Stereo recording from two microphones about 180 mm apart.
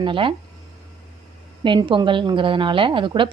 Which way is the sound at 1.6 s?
25° right (ahead or behind).